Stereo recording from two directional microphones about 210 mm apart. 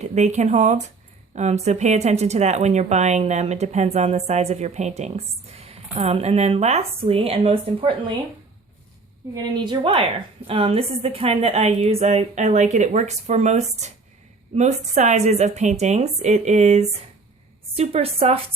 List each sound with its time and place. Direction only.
0.0 s a woman's voice: 35° right (ahead or behind)
9.3 s a woman's voice: 25° right (ahead or behind)